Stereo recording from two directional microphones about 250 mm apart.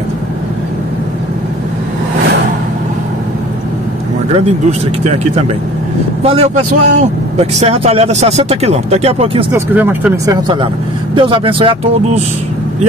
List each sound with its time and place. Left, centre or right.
4.6 s speech: right
9.5 s speech: centre